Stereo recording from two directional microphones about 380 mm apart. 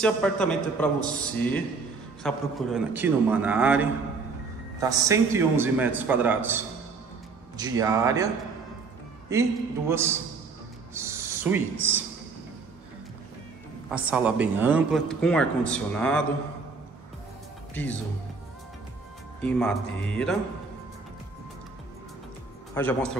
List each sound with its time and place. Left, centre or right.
0.0 s a man's voice: centre
9.3 s a man's voice: centre
11.0 s owl: centre
11.7 s a man's voice: right
13.8 s speech: centre
17.8 s speech: centre
19.4 s speech: centre
22.8 s speech: centre